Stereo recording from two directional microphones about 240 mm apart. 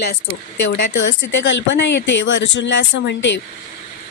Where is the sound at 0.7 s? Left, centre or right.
Left.